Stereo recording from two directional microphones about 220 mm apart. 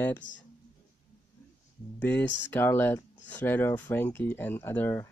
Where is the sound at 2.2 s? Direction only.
55° left (ahead or behind).